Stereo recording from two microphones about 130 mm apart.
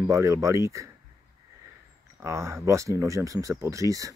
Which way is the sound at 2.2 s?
20° right (ahead or behind).